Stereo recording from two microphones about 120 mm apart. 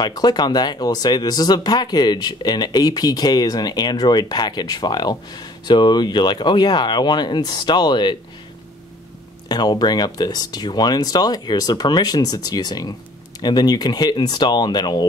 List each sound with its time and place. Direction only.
0.0 s speech: 35° left (ahead or behind)
9.5 s speech: 35° left (ahead or behind)